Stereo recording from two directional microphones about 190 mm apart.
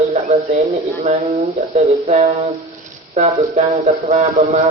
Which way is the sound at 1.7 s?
35° right (ahead or behind).